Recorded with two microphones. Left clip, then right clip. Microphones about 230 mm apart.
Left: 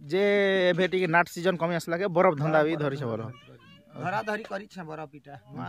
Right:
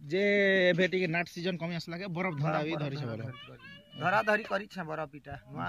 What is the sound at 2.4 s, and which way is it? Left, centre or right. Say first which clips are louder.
Speech: left 8 dB; centre.